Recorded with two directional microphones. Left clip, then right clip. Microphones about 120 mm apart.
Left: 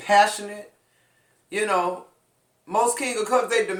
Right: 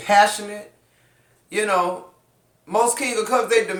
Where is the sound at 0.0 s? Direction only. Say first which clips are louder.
Right 2 dB; 25° right (ahead or behind).